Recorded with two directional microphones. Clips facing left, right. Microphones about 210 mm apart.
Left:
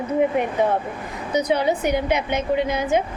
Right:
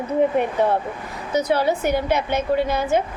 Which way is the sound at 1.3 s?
20° left (ahead or behind).